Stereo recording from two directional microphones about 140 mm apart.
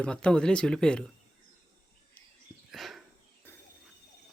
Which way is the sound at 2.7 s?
Centre (ahead or behind).